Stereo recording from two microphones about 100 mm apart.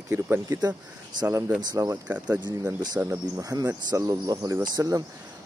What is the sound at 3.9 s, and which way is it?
Speech, 40° right (ahead or behind).